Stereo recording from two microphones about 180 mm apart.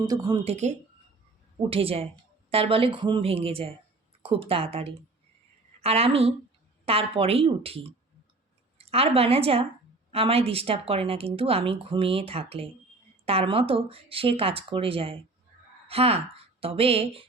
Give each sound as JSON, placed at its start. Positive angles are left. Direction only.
{"t": 0.0, "sound": "speech", "side_deg": -20}
{"t": 0.4, "sound": "a woman's voice", "side_deg": -40}